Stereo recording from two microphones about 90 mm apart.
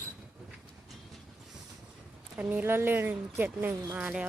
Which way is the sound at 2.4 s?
20° right (ahead or behind).